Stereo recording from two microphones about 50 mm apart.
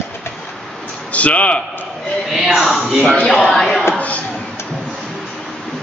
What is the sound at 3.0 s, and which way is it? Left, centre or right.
Speech, centre.